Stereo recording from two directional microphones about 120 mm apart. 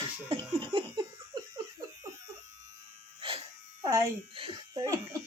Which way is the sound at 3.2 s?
50° right (ahead or behind).